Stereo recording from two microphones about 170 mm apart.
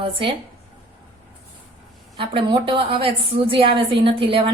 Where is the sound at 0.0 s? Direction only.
30° right (ahead or behind).